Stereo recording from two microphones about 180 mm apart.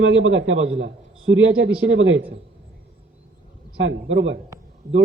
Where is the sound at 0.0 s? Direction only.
90° right.